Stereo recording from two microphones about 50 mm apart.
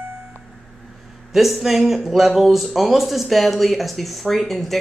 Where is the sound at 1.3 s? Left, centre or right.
Centre.